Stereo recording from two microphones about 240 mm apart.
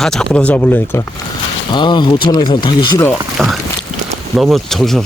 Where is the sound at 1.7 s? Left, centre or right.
Centre.